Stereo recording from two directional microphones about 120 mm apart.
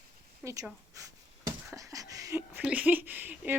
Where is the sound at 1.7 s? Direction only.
30° right (ahead or behind).